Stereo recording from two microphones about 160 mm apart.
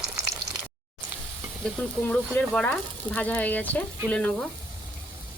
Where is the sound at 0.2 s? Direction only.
20° right (ahead or behind).